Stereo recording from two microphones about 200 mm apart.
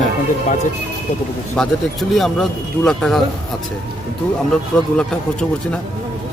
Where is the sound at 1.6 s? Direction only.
5° left (ahead or behind).